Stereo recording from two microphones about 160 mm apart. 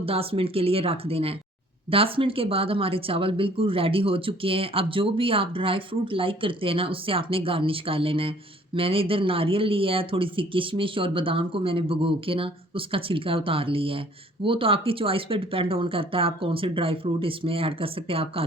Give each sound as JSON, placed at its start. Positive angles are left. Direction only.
{"t": 0.0, "sound": "speech", "side_deg": -35}